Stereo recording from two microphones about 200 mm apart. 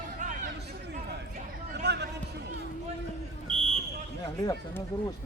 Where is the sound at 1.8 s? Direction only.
55° right (ahead or behind).